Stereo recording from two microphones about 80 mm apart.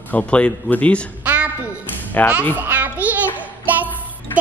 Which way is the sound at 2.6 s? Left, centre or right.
Right.